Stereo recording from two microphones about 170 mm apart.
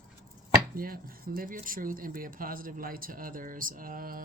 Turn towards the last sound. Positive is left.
turn(degrees=-55)  # may be behind; listen again after turning